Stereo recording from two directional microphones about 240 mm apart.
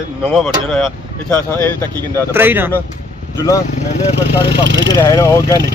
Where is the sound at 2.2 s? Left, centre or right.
Centre.